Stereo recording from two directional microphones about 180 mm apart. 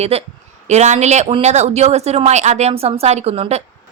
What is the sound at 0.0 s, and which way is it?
Speech, 35° right (ahead or behind).